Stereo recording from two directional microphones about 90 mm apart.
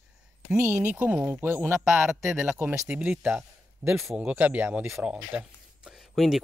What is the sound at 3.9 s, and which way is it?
Speech, centre (ahead or behind).